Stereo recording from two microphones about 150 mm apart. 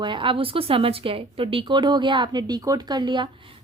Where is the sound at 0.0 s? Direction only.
35° right (ahead or behind).